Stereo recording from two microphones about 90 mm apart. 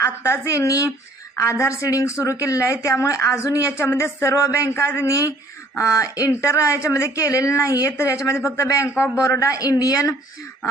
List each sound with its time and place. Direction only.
0.0 s speech: 30° left (ahead or behind)